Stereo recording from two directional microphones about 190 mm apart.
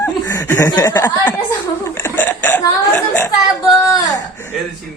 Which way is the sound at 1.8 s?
15° left (ahead or behind).